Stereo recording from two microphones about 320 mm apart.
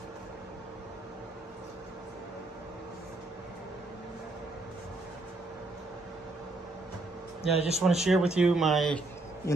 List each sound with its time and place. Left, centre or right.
7.5 s speech: centre
7.8 s speech: centre